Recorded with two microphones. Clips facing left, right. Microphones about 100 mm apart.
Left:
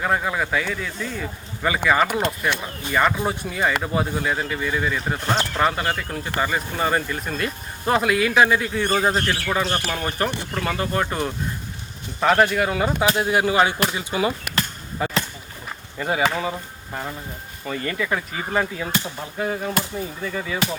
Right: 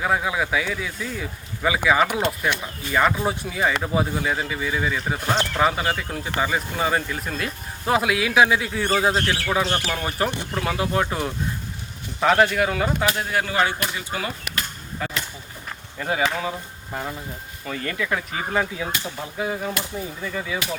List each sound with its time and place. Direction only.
0.0 s speech: 5° right (ahead or behind)
9.1 s speech: 15° right (ahead or behind)
9.6 s speech: 15° left (ahead or behind)
9.9 s speech: 5° right (ahead or behind)
13.1 s speech: 15° left (ahead or behind)
16.0 s speech: centre (ahead or behind)